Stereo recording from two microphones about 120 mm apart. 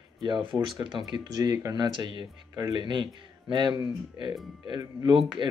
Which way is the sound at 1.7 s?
35° right (ahead or behind).